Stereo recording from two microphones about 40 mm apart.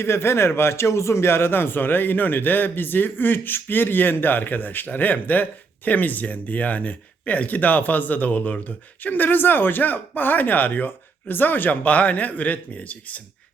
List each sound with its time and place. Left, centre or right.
0.0 s speech: left